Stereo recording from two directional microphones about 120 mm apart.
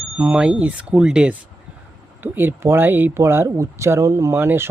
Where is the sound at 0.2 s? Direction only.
10° right (ahead or behind).